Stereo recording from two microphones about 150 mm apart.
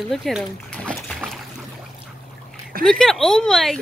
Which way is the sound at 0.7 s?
10° left (ahead or behind).